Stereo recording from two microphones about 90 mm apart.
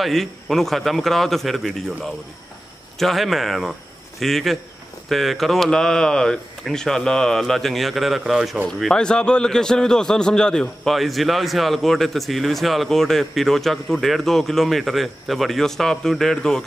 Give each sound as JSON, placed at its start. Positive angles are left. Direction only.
{"t": 0.0, "sound": "a man's voice", "side_deg": 0}
{"t": 3.0, "sound": "a man's voice", "side_deg": 0}